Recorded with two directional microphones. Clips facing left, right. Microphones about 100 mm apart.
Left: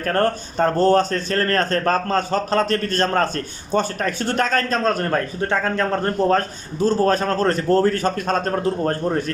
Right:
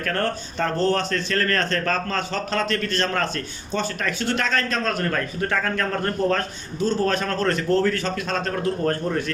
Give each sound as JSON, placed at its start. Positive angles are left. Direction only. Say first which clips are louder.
{"t": 0.0, "sound": "a man's voice", "louder": "left 5 dB", "side_deg": 40}
{"t": 8.6, "sound": "a man's voice", "louder": "left 2 dB", "side_deg": 30}